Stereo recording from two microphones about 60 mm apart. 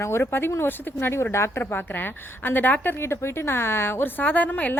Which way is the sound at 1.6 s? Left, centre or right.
Left.